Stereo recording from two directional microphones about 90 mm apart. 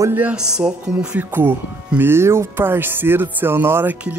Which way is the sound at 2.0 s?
25° right (ahead or behind).